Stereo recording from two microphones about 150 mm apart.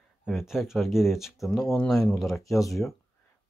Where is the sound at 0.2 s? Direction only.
Centre (ahead or behind).